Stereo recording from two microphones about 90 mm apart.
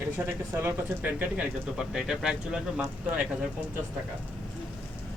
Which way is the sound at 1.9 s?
5° right (ahead or behind).